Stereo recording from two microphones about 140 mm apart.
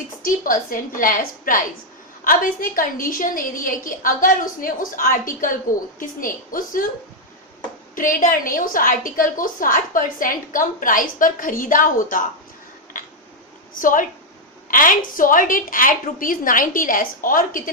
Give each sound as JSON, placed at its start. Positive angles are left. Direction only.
{"t": 0.3, "sound": "a woman's voice", "side_deg": 75}
{"t": 7.9, "sound": "a woman's voice", "side_deg": 75}
{"t": 12.9, "sound": "a sound", "side_deg": 70}
{"t": 13.7, "sound": "a woman's voice", "side_deg": 75}